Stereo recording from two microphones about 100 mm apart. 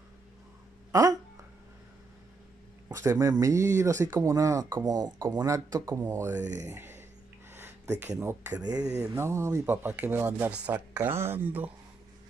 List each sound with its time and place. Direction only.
0.9 s a sound: 30° right (ahead or behind)
2.9 s speech: 35° right (ahead or behind)
6.0 s speech: 20° right (ahead or behind)